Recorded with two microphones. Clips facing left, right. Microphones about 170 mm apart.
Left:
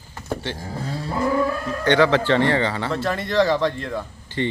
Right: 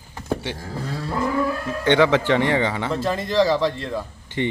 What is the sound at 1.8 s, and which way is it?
Speech, 20° right (ahead or behind).